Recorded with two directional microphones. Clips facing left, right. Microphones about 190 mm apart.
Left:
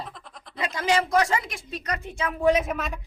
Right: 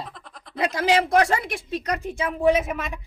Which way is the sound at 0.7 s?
65° right (ahead or behind).